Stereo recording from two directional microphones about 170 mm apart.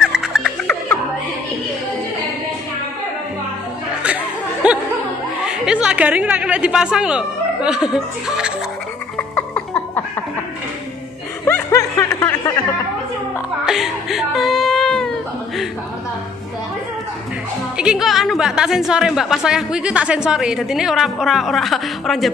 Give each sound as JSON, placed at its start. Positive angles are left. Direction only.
{"t": 0.0, "sound": "music", "side_deg": -5}
{"t": 4.6, "sound": "music", "side_deg": -5}
{"t": 5.4, "sound": "a woman's voice", "side_deg": -5}
{"t": 9.1, "sound": "music", "side_deg": 10}
{"t": 11.4, "sound": "snicker", "side_deg": 15}
{"t": 13.7, "sound": "a sound", "side_deg": 0}
{"t": 17.7, "sound": "a woman's voice", "side_deg": -5}